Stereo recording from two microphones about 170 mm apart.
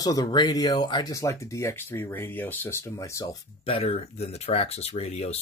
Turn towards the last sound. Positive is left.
turn(degrees=40)  # may be behind; listen again after turning